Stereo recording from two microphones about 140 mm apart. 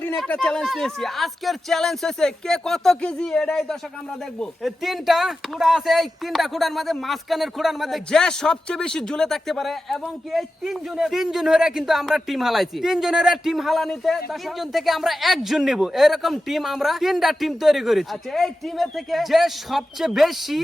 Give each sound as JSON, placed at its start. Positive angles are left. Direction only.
{"t": 0.3, "sound": "speech", "side_deg": 10}